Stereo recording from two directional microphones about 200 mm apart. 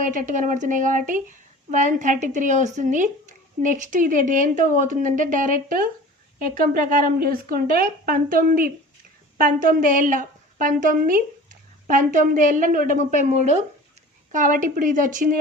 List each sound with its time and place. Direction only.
0.0 s a woman's voice: 40° right (ahead or behind)